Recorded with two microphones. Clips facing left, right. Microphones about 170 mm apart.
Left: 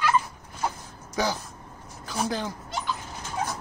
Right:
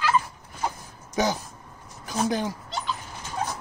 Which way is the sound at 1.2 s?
20° right (ahead or behind).